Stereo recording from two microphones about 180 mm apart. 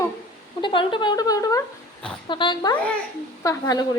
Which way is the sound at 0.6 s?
25° left (ahead or behind).